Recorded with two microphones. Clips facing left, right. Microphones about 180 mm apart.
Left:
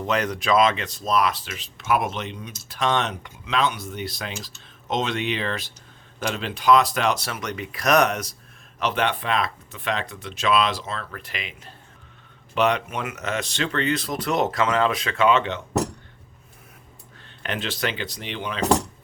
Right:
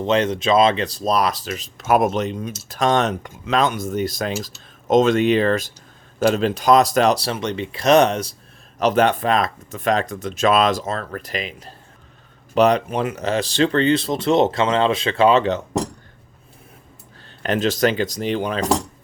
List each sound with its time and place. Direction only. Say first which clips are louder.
0.0 s speech: right 6 dB; 25° right (ahead or behind)
8.8 s speech: right 7 dB; 40° right (ahead or behind)
17.4 s speech: right 9 dB; 40° right (ahead or behind)